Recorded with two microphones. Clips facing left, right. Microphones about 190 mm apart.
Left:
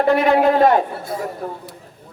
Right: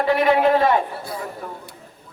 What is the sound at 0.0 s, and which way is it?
A man's voice, 45° left (ahead or behind).